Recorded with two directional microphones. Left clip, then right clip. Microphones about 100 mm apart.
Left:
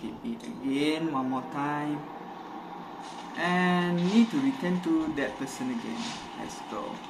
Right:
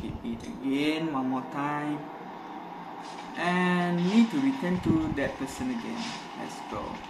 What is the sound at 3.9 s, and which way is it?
Speech, 30° left (ahead or behind).